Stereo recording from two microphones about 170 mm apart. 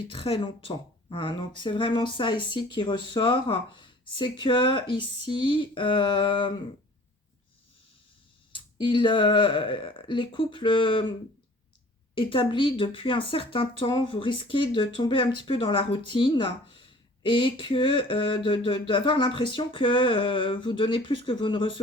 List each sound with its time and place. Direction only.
0.1 s speech: 30° left (ahead or behind)
8.5 s speech: 30° left (ahead or behind)
12.1 s speech: 30° left (ahead or behind)